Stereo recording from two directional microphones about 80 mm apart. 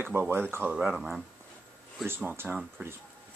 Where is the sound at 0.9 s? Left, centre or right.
Centre.